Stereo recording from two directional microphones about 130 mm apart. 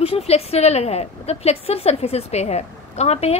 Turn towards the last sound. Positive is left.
turn(degrees=55)  # may be behind; listen again after turning